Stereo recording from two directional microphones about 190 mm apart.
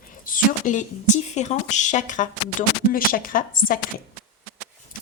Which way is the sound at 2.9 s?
45° left (ahead or behind).